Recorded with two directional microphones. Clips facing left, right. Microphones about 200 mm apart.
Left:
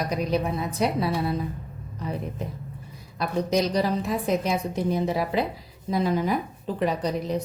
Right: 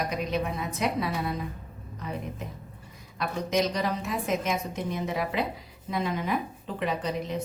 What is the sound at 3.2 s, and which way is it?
A woman's voice, 35° left (ahead or behind).